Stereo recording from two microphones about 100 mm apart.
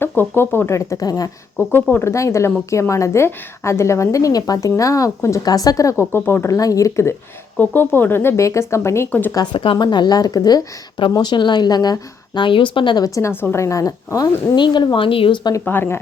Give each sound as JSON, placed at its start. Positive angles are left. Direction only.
{"t": 0.0, "sound": "a woman's voice", "side_deg": 20}
{"t": 1.5, "sound": "a woman's voice", "side_deg": 20}
{"t": 6.1, "sound": "a woman's voice", "side_deg": 20}
{"t": 6.6, "sound": "a woman's voice", "side_deg": 35}
{"t": 9.3, "sound": "a woman's voice", "side_deg": 45}
{"t": 13.1, "sound": "speech", "side_deg": 25}
{"t": 14.5, "sound": "a woman's voice", "side_deg": 50}
{"t": 15.6, "sound": "a woman's voice", "side_deg": 20}